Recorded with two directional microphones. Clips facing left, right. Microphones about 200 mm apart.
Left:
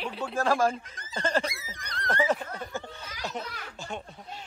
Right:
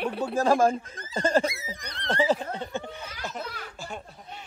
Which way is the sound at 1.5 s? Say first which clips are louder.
Right 3 dB; 25° right (ahead or behind).